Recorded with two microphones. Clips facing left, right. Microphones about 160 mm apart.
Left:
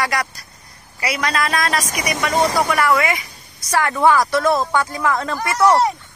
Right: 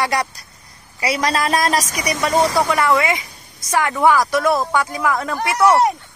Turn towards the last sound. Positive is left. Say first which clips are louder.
# even
turn(degrees=-15)  # may be behind; listen again after turning